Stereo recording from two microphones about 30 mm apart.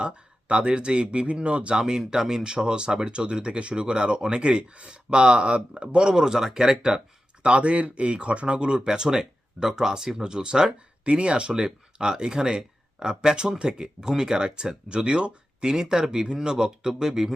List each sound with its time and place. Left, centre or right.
0.4 s speech: right
1.3 s speech: right
1.7 s speech: centre
7.4 s speech: right
8.4 s speech: right
11.0 s speech: right; by 17.3 s centre